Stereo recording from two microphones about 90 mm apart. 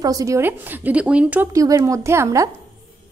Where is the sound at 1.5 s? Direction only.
40° right (ahead or behind).